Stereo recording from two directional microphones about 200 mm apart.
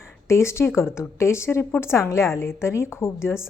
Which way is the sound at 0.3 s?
15° left (ahead or behind).